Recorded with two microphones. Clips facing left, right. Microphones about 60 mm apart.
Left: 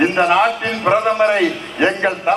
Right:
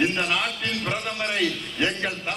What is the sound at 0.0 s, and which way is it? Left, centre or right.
A man's voice, left.